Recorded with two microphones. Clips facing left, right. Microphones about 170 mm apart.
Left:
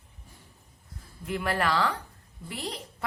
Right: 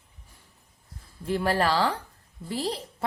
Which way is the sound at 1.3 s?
30° right (ahead or behind).